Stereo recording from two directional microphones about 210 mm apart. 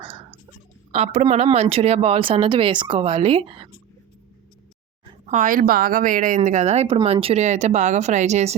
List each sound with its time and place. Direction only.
0.0 s whispering: 25° right (ahead or behind)
0.9 s speech: 30° right (ahead or behind)
5.2 s a woman's voice: 35° right (ahead or behind)